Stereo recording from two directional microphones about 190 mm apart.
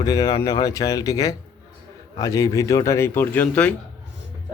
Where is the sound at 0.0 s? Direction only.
20° left (ahead or behind).